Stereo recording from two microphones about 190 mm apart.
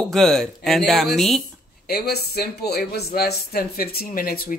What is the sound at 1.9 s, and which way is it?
Speech, 55° left (ahead or behind).